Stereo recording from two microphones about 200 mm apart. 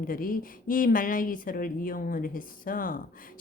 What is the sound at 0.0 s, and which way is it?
A woman's voice, 45° left (ahead or behind).